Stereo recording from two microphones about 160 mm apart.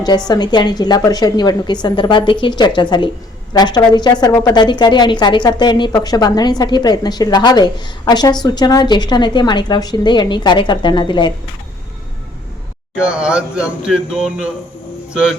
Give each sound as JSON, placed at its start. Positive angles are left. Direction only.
{"t": 0.0, "sound": "a woman's voice", "side_deg": 25}
{"t": 13.0, "sound": "a man's voice", "side_deg": -5}